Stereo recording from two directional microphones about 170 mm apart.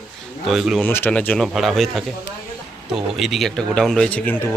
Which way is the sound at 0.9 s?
10° left (ahead or behind).